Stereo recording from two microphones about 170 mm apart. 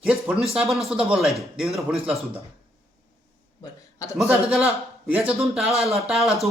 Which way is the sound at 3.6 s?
20° left (ahead or behind).